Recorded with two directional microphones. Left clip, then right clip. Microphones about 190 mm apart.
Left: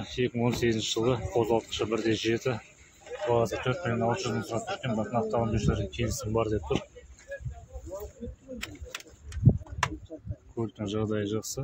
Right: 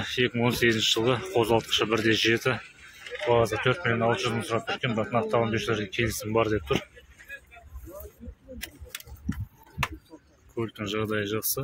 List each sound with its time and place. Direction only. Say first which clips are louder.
0.0 s speech: right 4 dB; centre (ahead or behind)
10.5 s speech: right 2 dB; 15° left (ahead or behind)